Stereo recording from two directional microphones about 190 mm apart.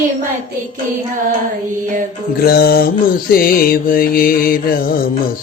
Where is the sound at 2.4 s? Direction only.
55° left (ahead or behind).